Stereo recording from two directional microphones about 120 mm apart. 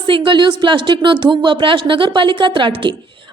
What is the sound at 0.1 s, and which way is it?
A woman's voice, 45° right (ahead or behind).